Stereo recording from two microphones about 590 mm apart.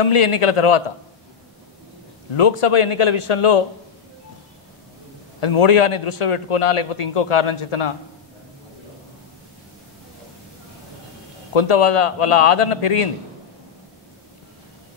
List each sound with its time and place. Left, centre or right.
0.1 s a man's voice: left
2.3 s a man's voice: left
5.4 s a man's voice: left
7.2 s a man's voice: left
11.5 s a man's voice: left